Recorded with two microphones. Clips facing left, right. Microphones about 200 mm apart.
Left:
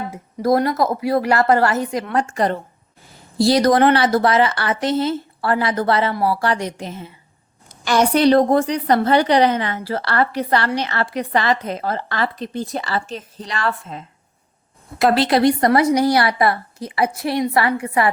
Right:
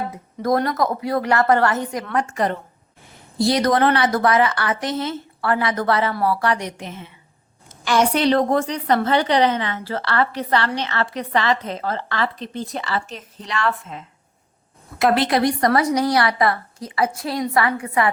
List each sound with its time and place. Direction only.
0.4 s a woman's voice: 30° left (ahead or behind)